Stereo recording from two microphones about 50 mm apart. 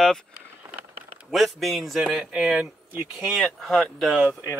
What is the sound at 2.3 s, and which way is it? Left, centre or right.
Speech, centre.